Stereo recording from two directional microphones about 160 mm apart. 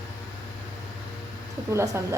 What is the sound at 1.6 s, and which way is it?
Speech, 20° right (ahead or behind).